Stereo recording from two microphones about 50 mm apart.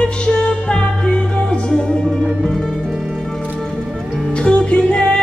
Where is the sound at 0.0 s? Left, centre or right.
Centre.